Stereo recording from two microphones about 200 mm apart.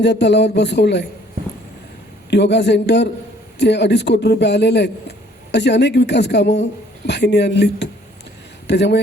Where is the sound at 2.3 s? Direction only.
55° left (ahead or behind).